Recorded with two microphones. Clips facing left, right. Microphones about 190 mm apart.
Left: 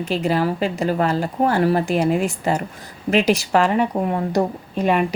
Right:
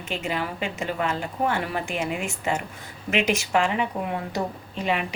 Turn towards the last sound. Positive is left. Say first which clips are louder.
# left 7 dB
turn(degrees=50)  # may be behind; listen again after turning